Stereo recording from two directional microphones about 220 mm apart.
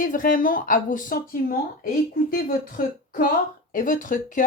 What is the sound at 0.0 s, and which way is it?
A woman's voice, 40° left (ahead or behind).